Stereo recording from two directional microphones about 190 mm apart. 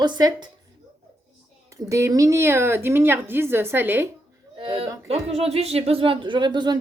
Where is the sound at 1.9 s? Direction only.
15° right (ahead or behind).